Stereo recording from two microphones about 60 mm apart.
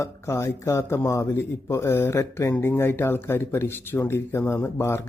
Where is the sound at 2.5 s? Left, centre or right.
Left.